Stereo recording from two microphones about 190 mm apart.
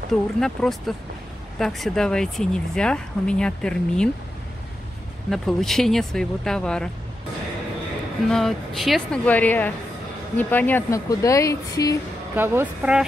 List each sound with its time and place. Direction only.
0.1 s speech: centre (ahead or behind)
5.3 s speech: centre (ahead or behind)
8.3 s speech: centre (ahead or behind); by 12.0 s 20° left (ahead or behind)
12.4 s speech: 10° right (ahead or behind)